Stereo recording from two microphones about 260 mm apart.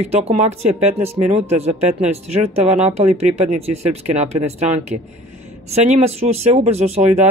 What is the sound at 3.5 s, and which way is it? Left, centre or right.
Speech, right.